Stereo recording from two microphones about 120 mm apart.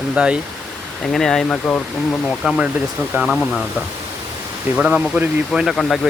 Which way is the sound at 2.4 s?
5° right (ahead or behind).